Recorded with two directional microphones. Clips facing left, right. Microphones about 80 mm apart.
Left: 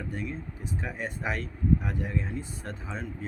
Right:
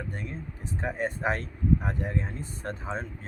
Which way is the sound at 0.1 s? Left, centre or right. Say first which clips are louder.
Left 2 dB; right.